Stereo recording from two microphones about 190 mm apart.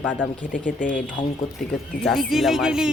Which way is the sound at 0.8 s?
45° left (ahead or behind).